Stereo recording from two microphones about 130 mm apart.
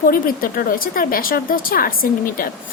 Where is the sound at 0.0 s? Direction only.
90° left.